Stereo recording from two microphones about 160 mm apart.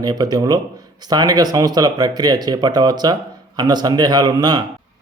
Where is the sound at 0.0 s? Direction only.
25° right (ahead or behind).